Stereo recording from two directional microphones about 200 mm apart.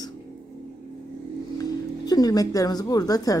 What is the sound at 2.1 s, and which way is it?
Speech, 20° left (ahead or behind).